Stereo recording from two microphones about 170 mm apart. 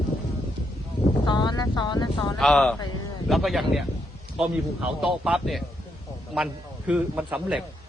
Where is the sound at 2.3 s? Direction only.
5° left (ahead or behind).